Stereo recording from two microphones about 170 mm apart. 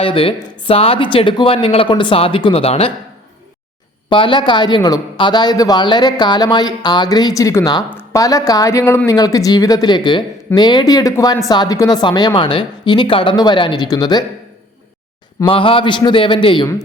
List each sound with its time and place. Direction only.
0.0 s speech: 35° left (ahead or behind)
4.1 s speech: 30° left (ahead or behind)
15.4 s speech: 30° left (ahead or behind)